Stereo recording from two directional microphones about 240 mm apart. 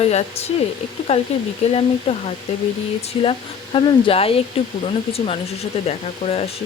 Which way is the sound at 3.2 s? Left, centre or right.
Left.